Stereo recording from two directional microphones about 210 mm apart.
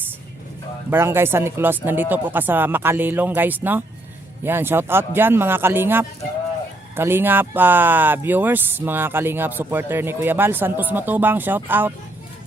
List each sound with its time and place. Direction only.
0.9 s speech: 10° right (ahead or behind)